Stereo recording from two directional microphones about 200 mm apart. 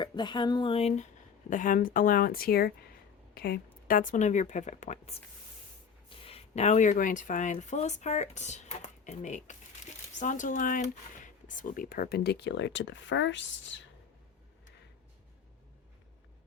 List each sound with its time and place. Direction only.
0.0 s speech: 20° left (ahead or behind); by 13.8 s 65° left (ahead or behind)